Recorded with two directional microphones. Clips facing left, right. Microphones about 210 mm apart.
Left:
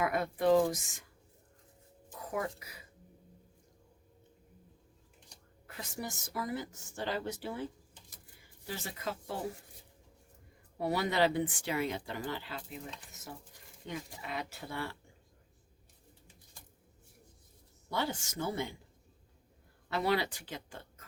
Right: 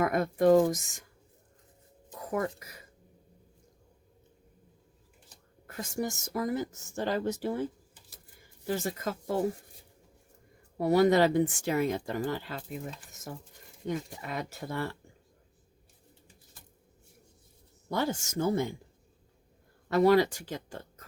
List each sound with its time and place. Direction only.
0.0 s a woman's voice: 45° right (ahead or behind)
2.3 s a woman's voice: 45° right (ahead or behind)
5.6 s a woman's voice: 45° right (ahead or behind)
10.8 s a woman's voice: 45° right (ahead or behind)
13.8 s a woman's voice: 45° right (ahead or behind)
17.8 s a woman's voice: 45° right (ahead or behind)
19.9 s a woman's voice: 45° right (ahead or behind)